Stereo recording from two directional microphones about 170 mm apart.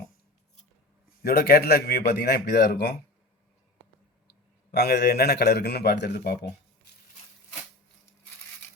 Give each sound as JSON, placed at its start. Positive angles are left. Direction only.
{"t": 1.2, "sound": "a man's voice", "side_deg": 65}
{"t": 4.3, "sound": "a man's voice", "side_deg": 70}